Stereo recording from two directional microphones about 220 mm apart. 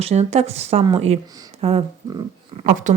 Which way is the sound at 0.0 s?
30° right (ahead or behind).